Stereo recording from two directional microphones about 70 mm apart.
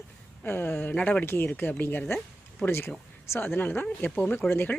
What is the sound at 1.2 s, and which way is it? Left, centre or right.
Speech, left.